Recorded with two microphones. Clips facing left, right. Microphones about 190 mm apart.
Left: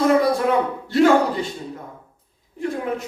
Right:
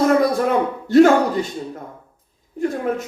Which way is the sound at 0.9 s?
45° right (ahead or behind).